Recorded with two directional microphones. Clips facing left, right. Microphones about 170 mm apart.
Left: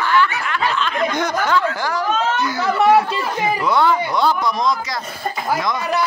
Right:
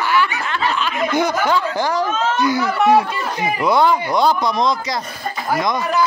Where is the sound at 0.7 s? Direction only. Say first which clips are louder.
Right 1 dB; 10° right (ahead or behind).